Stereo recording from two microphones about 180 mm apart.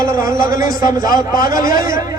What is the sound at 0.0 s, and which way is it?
A man's voice, 20° right (ahead or behind).